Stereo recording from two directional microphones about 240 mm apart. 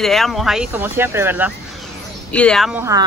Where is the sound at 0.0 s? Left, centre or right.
Centre.